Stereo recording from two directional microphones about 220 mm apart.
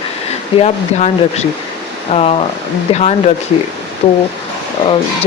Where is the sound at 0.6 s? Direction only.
30° left (ahead or behind).